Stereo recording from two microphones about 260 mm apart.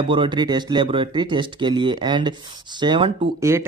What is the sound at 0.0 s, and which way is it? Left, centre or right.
Speech, centre.